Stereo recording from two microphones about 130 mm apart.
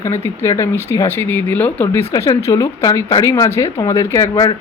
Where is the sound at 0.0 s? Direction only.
20° left (ahead or behind).